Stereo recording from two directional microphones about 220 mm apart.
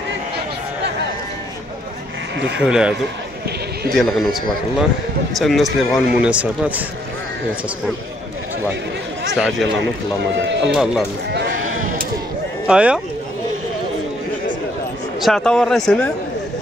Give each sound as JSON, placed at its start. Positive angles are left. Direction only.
{"t": 2.6, "sound": "speech", "side_deg": -5}
{"t": 9.3, "sound": "speech", "side_deg": 0}
{"t": 10.4, "sound": "speech", "side_deg": -55}
{"t": 10.7, "sound": "speech", "side_deg": 0}
{"t": 12.6, "sound": "speech", "side_deg": -5}
{"t": 15.1, "sound": "speech", "side_deg": 0}